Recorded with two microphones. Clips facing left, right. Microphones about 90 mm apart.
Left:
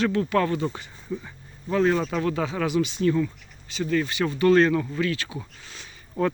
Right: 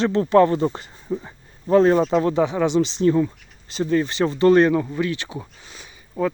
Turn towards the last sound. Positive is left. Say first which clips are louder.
# right 1 dB
turn(degrees=-15)  # may be behind; listen again after turning